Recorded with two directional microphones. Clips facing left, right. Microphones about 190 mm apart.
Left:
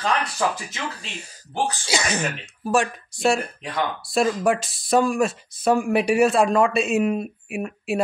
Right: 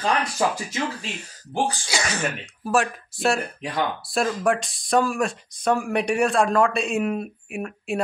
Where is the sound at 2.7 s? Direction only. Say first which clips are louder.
Left 1 dB; centre (ahead or behind).